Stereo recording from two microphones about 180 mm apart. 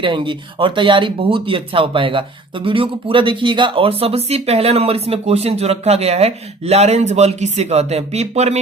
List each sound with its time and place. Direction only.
0.0 s speech: 30° right (ahead or behind)